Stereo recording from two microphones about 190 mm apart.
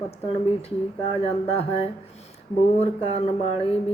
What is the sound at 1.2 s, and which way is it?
Speech, 30° left (ahead or behind).